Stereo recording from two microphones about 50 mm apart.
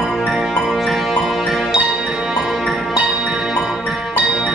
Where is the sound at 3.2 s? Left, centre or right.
Centre.